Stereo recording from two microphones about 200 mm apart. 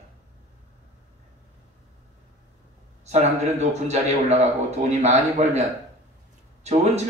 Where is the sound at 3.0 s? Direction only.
35° right (ahead or behind).